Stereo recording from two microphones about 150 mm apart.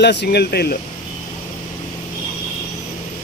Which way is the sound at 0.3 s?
90° left.